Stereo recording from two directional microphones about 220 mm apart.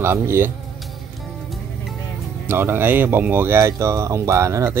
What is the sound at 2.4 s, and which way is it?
Speech, 10° right (ahead or behind).